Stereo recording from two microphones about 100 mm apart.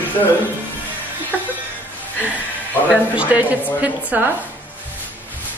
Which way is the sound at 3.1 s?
15° right (ahead or behind).